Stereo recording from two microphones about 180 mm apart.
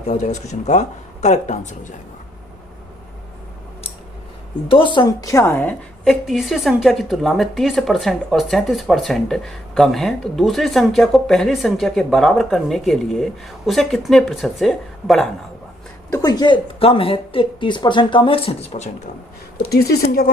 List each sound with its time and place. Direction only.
0.1 s speech: 40° left (ahead or behind)
4.7 s a woman's voice: 30° left (ahead or behind); by 6.1 s 10° left (ahead or behind)
6.2 s speech: centre (ahead or behind)
16.2 s a woman's voice: 25° left (ahead or behind)
19.7 s speech: 60° left (ahead or behind)